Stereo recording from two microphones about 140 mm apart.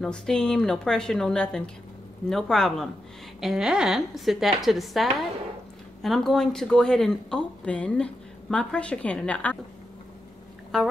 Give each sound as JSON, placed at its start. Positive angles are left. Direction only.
{"t": 0.0, "sound": "a woman's voice", "side_deg": 5}